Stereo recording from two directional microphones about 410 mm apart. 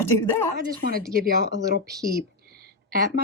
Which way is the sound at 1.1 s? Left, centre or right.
Right.